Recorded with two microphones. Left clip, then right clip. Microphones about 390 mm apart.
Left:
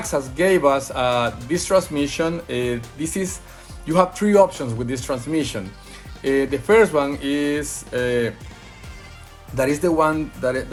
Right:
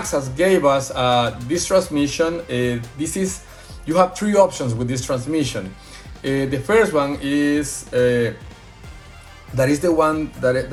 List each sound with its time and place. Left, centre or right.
0.0 s speech: left
9.6 s speech: left